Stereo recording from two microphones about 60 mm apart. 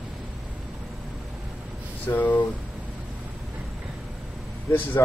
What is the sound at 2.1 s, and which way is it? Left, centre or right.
Speech, left.